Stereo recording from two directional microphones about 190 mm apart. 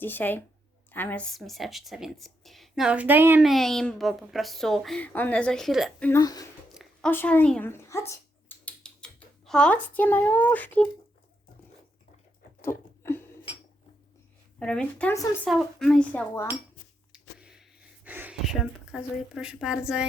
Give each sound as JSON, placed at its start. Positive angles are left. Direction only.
{"t": 0.0, "sound": "a woman's voice", "side_deg": 10}
{"t": 6.1, "sound": "speech", "side_deg": 20}
{"t": 7.1, "sound": "computer keyboard", "side_deg": 10}
{"t": 9.5, "sound": "speech", "side_deg": 5}
{"t": 12.6, "sound": "a sound", "side_deg": 10}
{"t": 14.6, "sound": "a woman's voice", "side_deg": 5}
{"t": 17.1, "sound": "a sound", "side_deg": -5}
{"t": 18.0, "sound": "speech", "side_deg": -10}